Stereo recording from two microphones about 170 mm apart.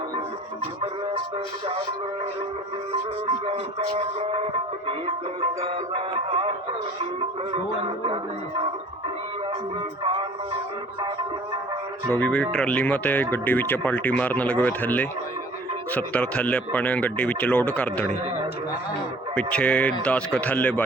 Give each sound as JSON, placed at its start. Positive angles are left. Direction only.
{"t": 3.4, "sound": "speech", "side_deg": -35}
{"t": 5.6, "sound": "speech", "side_deg": -35}
{"t": 7.5, "sound": "speech", "side_deg": -30}
{"t": 10.0, "sound": "speech", "side_deg": -35}
{"t": 12.1, "sound": "speech", "side_deg": 5}
{"t": 19.4, "sound": "speech", "side_deg": 5}